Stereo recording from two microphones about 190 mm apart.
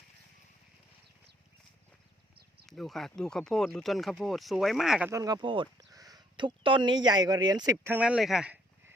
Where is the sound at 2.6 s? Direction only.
Centre (ahead or behind).